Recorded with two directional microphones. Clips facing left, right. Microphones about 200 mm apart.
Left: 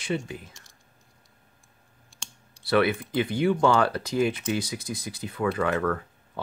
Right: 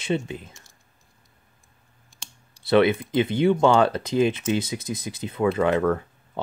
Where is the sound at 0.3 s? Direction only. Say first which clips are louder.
Right 3 dB; 25° right (ahead or behind).